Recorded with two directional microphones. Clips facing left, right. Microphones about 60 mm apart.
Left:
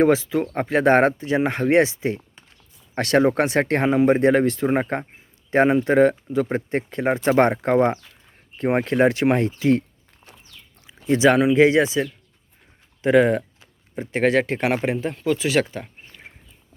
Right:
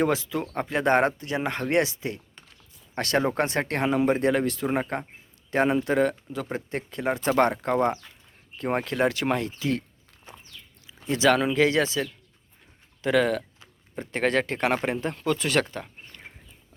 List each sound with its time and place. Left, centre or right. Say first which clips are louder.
0.0 s speech: left 7 dB; left
3.2 s speech: left 7 dB; left
3.6 s speech: left 7 dB; left
10.8 s a sound: left 5 dB; left
11.5 s speech: left 6 dB; left
13.0 s a sound: left 6 dB; left
13.9 s speech: left 5 dB; centre